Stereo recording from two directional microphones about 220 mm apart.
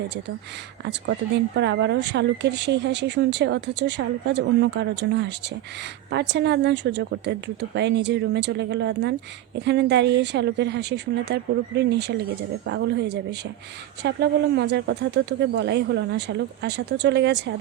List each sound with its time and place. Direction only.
1.5 s speech: 50° right (ahead or behind)